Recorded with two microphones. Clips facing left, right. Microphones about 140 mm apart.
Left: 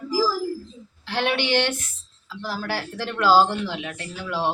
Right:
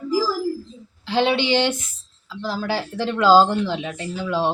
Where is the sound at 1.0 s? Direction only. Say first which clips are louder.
Right 5 dB; 20° right (ahead or behind).